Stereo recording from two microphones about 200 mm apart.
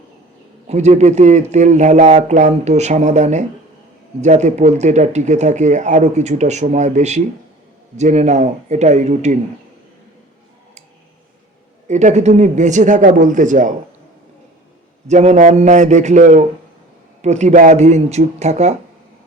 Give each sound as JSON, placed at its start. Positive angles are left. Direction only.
{"t": 0.7, "sound": "speech", "side_deg": -35}
{"t": 11.9, "sound": "speech", "side_deg": -35}
{"t": 15.1, "sound": "speech", "side_deg": -35}